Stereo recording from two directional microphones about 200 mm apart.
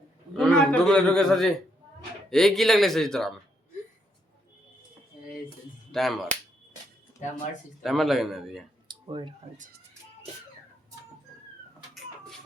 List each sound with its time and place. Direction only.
0.3 s a man's voice: 5° left (ahead or behind)
5.9 s speech: centre (ahead or behind)
7.8 s speech: centre (ahead or behind)
8.9 s a sound: 25° right (ahead or behind)